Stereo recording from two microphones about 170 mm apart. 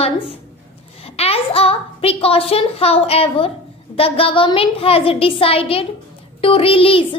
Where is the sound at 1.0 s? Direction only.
35° left (ahead or behind).